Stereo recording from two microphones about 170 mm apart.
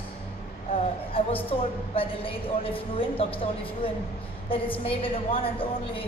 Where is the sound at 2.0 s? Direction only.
30° left (ahead or behind).